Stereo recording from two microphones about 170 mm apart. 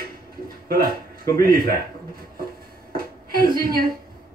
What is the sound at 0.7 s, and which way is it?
Speech, 60° right (ahead or behind).